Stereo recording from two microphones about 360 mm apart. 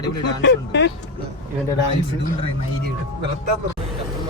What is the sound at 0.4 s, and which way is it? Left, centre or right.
Speech, left.